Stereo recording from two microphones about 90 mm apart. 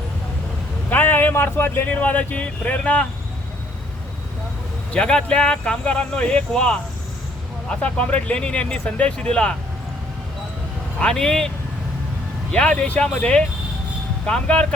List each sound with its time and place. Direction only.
0.9 s speech: 20° left (ahead or behind)
4.9 s speech: 10° left (ahead or behind)
11.0 s speech: 5° left (ahead or behind)